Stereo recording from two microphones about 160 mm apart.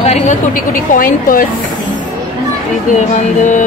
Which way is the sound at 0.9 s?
60° left (ahead or behind).